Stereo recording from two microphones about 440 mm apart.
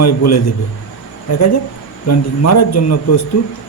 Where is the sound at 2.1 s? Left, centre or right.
Left.